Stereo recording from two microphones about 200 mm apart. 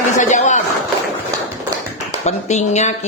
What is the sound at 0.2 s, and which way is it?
Speech, 35° left (ahead or behind).